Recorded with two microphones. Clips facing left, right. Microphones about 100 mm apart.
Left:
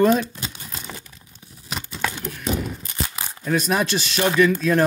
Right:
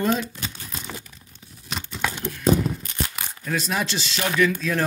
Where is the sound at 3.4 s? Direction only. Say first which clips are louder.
Left 5 dB; 50° left (ahead or behind).